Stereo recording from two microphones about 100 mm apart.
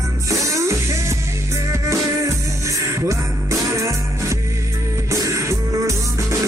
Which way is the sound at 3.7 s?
30° right (ahead or behind).